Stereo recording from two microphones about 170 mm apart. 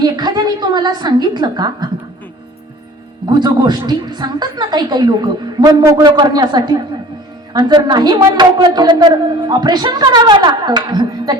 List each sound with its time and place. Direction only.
0.0 s a woman's voice: 25° right (ahead or behind)
3.2 s a woman's voice: 25° right (ahead or behind)